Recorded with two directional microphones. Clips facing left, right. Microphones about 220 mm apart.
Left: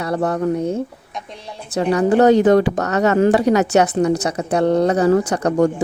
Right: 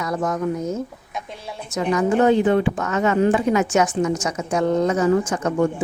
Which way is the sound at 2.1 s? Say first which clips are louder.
Left 5 dB; 75° left (ahead or behind).